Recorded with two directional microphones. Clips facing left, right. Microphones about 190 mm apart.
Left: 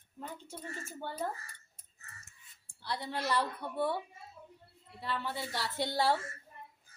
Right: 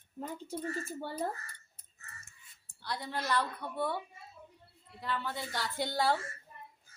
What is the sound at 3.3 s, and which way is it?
Speech, 10° left (ahead or behind).